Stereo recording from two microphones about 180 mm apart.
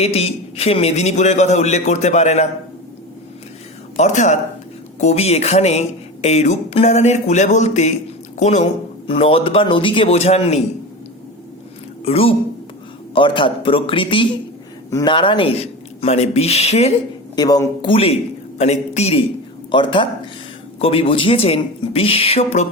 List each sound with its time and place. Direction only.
0.0 s a man's voice: 35° left (ahead or behind)
3.9 s a man's voice: 40° left (ahead or behind)
12.0 s a man's voice: 35° left (ahead or behind)
17.3 s a man's voice: 20° left (ahead or behind)
17.9 s a man's voice: 35° left (ahead or behind)
19.7 s a man's voice: 25° left (ahead or behind)